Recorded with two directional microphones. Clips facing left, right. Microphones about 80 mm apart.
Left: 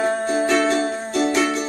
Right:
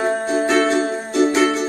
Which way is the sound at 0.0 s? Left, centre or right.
Centre.